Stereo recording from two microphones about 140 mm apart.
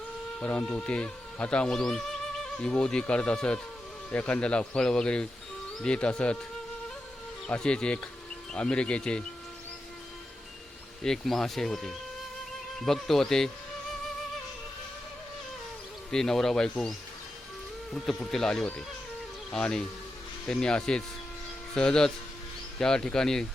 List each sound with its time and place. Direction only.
0.3 s speech: 5° left (ahead or behind)
7.4 s speech: 5° left (ahead or behind)
11.0 s speech: 5° left (ahead or behind)
16.1 s speech: 5° left (ahead or behind)
17.9 s speech: 5° left (ahead or behind)